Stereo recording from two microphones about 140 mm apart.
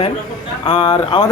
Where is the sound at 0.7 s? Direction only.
40° left (ahead or behind).